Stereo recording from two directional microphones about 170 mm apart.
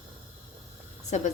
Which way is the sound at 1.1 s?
45° left (ahead or behind).